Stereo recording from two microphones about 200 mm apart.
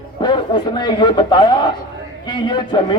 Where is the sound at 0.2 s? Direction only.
20° left (ahead or behind).